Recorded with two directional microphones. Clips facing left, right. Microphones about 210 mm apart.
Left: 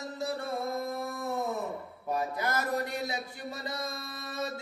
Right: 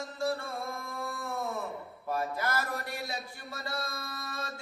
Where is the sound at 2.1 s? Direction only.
20° left (ahead or behind).